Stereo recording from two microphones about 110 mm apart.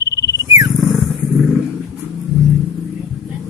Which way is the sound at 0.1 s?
30° right (ahead or behind).